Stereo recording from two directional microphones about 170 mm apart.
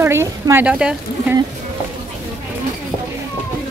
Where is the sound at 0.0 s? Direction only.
15° right (ahead or behind).